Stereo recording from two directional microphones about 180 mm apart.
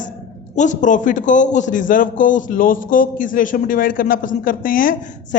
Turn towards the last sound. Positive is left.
turn(degrees=50)  # may be behind; listen again after turning